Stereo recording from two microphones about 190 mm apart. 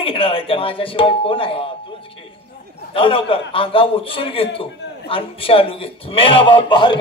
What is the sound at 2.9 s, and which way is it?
A man's voice, 30° left (ahead or behind).